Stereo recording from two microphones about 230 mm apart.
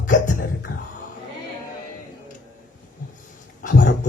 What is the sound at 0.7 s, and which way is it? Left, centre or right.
Speech, left.